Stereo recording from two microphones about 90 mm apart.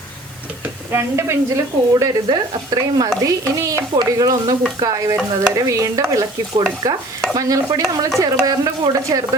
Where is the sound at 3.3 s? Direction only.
35° right (ahead or behind).